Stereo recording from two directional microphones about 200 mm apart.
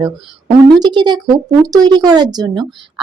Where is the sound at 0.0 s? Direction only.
20° right (ahead or behind).